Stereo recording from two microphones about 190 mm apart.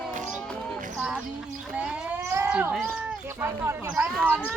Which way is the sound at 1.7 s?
5° right (ahead or behind).